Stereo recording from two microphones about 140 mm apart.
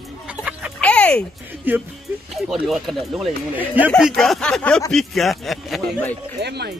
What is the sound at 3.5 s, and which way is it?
Speech, 10° right (ahead or behind).